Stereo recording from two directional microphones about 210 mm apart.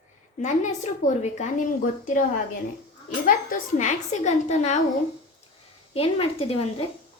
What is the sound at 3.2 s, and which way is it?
A woman's voice, 40° left (ahead or behind).